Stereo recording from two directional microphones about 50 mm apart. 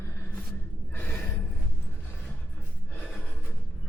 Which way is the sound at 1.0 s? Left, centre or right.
Left.